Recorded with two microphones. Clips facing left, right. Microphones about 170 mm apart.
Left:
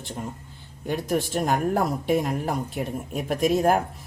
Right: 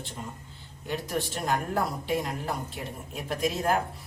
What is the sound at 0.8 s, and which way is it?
Speech, 50° left (ahead or behind).